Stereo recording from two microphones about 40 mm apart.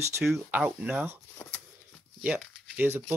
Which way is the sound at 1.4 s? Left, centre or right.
Left.